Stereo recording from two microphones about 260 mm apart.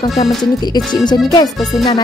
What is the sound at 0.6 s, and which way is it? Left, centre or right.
Speech, centre.